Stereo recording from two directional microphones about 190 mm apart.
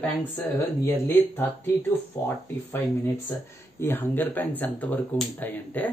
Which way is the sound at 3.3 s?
10° left (ahead or behind).